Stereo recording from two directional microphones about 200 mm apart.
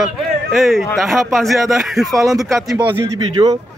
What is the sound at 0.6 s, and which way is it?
Speech, centre (ahead or behind).